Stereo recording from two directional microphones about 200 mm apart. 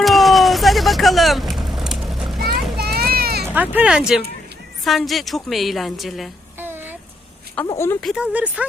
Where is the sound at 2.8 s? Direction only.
50° right (ahead or behind).